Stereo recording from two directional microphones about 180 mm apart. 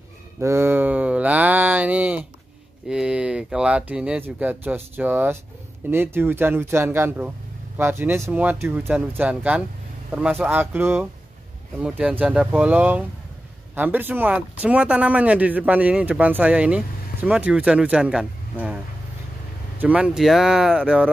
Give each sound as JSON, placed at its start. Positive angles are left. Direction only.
{"t": 0.4, "sound": "a sound", "side_deg": -15}
{"t": 2.9, "sound": "speech", "side_deg": -5}
{"t": 19.8, "sound": "speech", "side_deg": -5}